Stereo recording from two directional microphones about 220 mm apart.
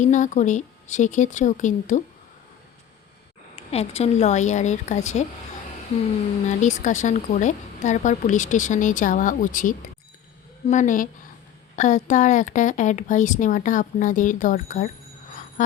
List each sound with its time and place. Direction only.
0.0 s speech: 35° left (ahead or behind)
3.5 s speech: 30° left (ahead or behind)
6.5 s speech: 35° left (ahead or behind)
15.3 s a sound: 35° left (ahead or behind)